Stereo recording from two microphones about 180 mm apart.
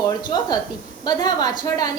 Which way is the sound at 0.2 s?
25° left (ahead or behind).